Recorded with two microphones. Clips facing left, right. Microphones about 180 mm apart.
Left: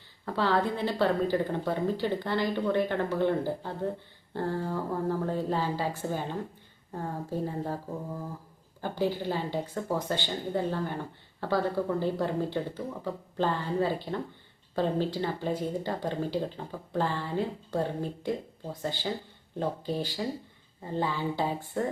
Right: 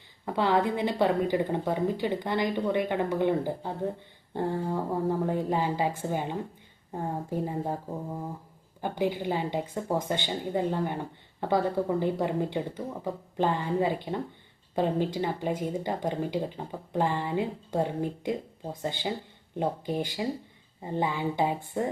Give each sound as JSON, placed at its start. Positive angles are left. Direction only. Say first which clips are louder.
{"t": 0.3, "sound": "speech", "louder": "right 2 dB", "side_deg": -15}
{"t": 8.8, "sound": "speech", "louder": "right 1 dB", "side_deg": -15}